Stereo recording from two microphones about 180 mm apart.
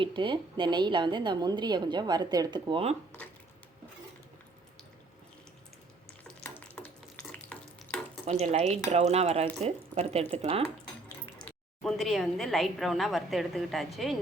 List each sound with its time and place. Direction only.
0.0 s a woman's voice: 25° right (ahead or behind)
6.2 s stir: 5° left (ahead or behind)
8.2 s speech: 40° right (ahead or behind)
11.4 s a woman's voice: 5° left (ahead or behind)